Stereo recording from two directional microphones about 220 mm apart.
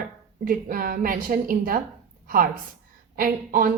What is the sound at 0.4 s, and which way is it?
A woman's voice, 40° right (ahead or behind).